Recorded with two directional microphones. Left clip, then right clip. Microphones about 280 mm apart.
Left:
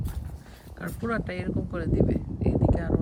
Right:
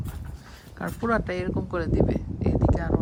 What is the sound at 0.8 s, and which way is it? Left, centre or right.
Speech, centre.